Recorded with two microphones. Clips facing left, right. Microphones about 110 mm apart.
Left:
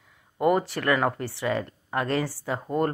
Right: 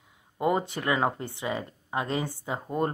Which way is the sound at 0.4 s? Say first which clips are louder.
Left 4 dB; 20° right (ahead or behind).